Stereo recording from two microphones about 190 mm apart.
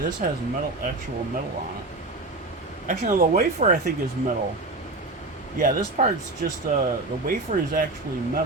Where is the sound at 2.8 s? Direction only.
45° right (ahead or behind).